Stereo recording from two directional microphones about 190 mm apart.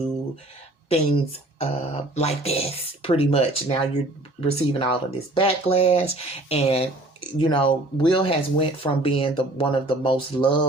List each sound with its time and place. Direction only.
0.9 s speech: 30° left (ahead or behind)